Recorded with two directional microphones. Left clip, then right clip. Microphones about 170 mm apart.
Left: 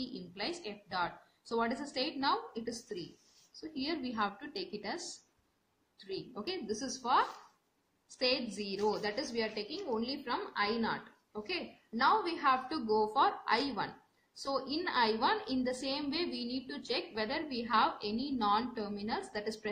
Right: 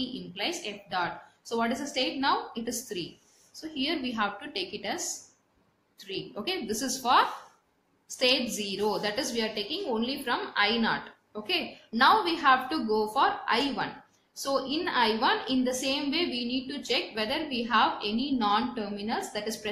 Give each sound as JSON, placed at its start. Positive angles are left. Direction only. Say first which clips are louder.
{"t": 0.0, "sound": "a woman's voice", "louder": "right 7 dB", "side_deg": 25}
{"t": 5.9, "sound": "a woman's voice", "louder": "right 6 dB", "side_deg": 25}